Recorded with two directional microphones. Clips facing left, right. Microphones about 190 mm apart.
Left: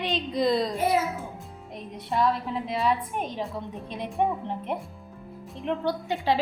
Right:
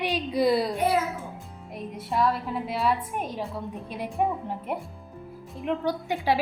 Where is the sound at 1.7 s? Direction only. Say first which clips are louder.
Even; centre (ahead or behind).